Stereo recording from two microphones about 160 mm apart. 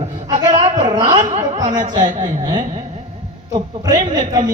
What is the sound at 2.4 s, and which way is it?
A woman's voice, 25° right (ahead or behind).